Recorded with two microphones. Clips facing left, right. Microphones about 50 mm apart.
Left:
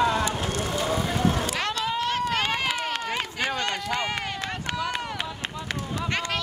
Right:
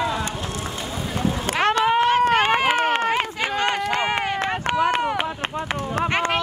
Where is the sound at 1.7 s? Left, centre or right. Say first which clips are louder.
Right 9 dB; right.